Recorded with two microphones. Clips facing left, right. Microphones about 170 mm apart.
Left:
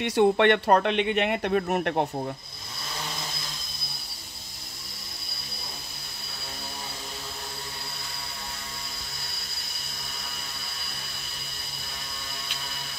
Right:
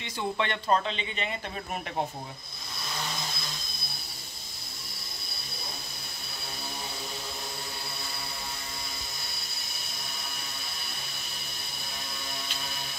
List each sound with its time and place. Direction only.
0.0 s speech: 70° left (ahead or behind)